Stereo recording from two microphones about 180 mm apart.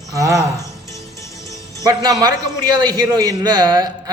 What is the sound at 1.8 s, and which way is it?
Speech, 20° right (ahead or behind).